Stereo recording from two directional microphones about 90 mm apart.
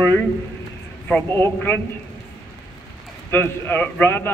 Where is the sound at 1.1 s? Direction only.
25° left (ahead or behind).